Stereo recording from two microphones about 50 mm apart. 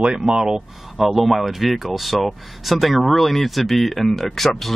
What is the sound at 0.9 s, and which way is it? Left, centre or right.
Speech, centre.